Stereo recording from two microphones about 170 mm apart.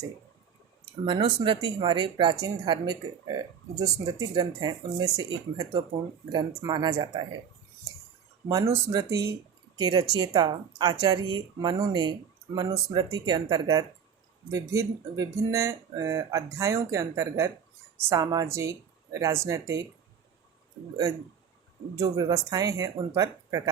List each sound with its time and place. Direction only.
1.0 s speech: 30° right (ahead or behind)
8.4 s speech: 20° right (ahead or behind)
21.9 s speech: 20° right (ahead or behind)